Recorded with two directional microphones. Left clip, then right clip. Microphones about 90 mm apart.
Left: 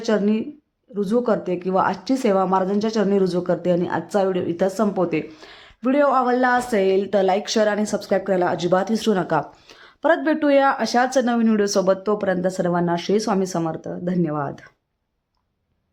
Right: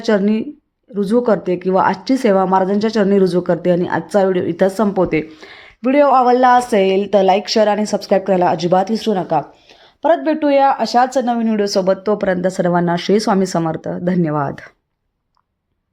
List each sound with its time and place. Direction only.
0.0 s a woman's voice: 40° right (ahead or behind)
8.8 s a woman's voice: 5° right (ahead or behind)
11.1 s speech: centre (ahead or behind)
11.8 s speech: 25° right (ahead or behind)
12.2 s speech: 40° right (ahead or behind); by 14.7 s 55° right (ahead or behind)